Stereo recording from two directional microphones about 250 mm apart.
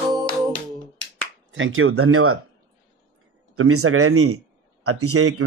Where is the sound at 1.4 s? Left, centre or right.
Right.